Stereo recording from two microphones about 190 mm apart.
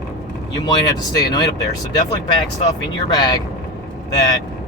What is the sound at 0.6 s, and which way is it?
Speech, 20° left (ahead or behind).